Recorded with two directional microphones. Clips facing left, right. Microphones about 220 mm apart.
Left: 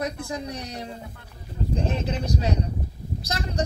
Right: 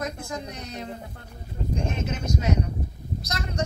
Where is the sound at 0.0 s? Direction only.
35° left (ahead or behind).